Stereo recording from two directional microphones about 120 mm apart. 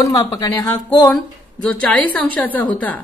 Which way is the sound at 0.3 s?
30° left (ahead or behind).